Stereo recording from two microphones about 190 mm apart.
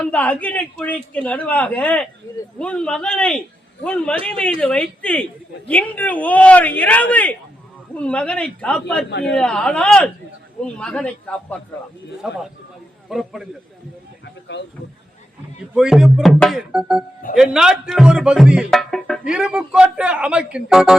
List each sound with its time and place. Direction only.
0.0 s a woman's voice: 5° left (ahead or behind)
14.5 s speech: 65° left (ahead or behind)
15.7 s speech: 5° right (ahead or behind)